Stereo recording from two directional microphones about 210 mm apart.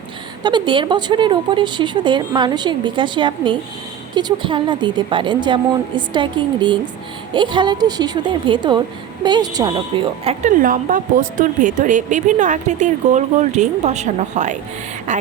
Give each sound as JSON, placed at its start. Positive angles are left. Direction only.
{"t": 0.4, "sound": "a woman's voice", "side_deg": -20}